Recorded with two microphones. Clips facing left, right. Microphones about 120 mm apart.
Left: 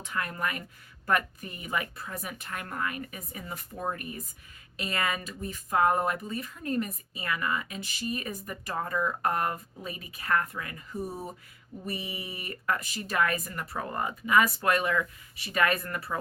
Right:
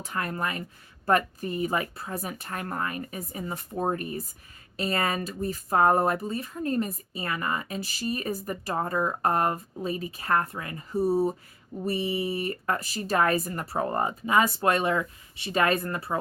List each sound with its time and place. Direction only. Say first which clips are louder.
0.0 s speech: right 2 dB; 35° right (ahead or behind)